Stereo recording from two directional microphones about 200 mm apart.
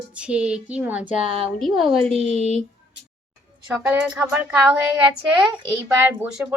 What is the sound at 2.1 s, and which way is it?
Speech, 30° right (ahead or behind).